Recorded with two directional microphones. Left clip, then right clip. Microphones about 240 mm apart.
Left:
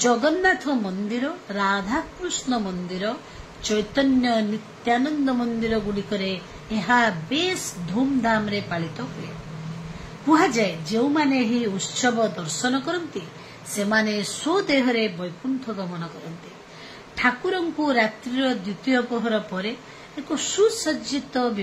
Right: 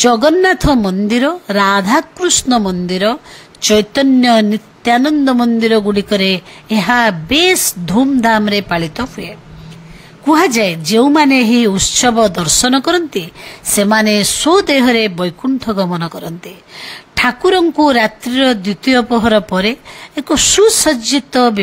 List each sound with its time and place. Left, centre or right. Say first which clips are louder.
0.0 s a woman's voice: right 10 dB; right
10.3 s a woman's voice: right 8 dB; right
17.1 s a woman's voice: right 11 dB; right